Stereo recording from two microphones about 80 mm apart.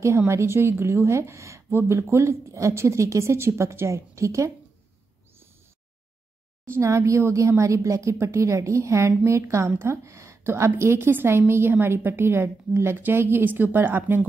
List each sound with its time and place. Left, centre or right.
0.3 s a woman's voice: right
6.6 s a woman's voice: right